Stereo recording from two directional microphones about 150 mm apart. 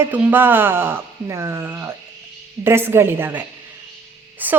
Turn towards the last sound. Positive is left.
turn(degrees=-10)  # may be behind; listen again after turning